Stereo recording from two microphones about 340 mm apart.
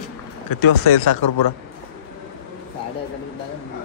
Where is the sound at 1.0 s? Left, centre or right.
Left.